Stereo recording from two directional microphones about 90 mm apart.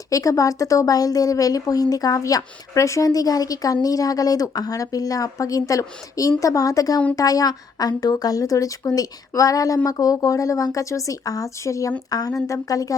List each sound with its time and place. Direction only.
0.1 s a woman's voice: 40° left (ahead or behind)